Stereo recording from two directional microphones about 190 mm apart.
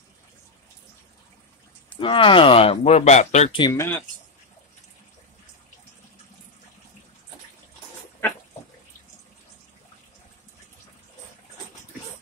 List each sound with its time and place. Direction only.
2.0 s speech: 25° left (ahead or behind)
3.5 s speech: 20° left (ahead or behind)